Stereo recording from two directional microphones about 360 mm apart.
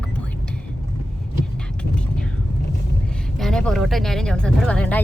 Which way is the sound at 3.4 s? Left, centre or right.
Centre.